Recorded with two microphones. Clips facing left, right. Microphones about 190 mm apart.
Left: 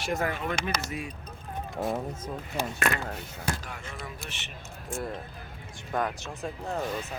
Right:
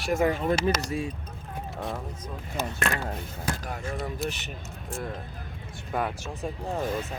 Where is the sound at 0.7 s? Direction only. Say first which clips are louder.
Right 4 dB; 25° right (ahead or behind).